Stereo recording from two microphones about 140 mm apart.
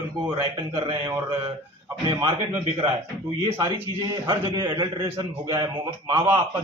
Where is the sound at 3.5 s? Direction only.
30° right (ahead or behind).